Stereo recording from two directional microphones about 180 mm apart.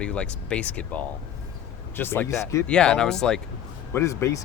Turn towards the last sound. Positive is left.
turn(degrees=15)  # may be behind; listen again after turning